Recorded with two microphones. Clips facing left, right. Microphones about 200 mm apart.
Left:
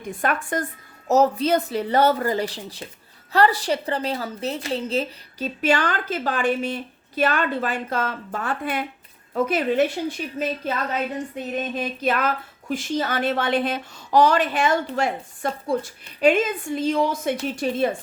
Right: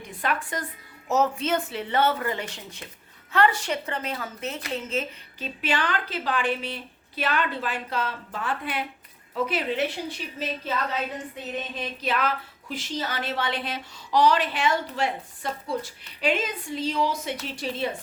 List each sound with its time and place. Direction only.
0.1 s speech: 50° left (ahead or behind)
11.8 s speech: 50° left (ahead or behind)